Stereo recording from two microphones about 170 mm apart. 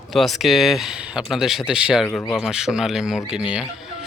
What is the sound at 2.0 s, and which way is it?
Speech, 10° left (ahead or behind).